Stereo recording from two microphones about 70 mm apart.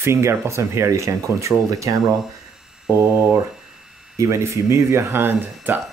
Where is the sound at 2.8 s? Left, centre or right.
Centre.